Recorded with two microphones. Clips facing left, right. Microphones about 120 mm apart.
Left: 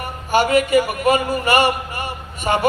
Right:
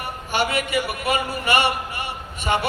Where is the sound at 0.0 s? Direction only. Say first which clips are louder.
Left 6 dB; 40° left (ahead or behind).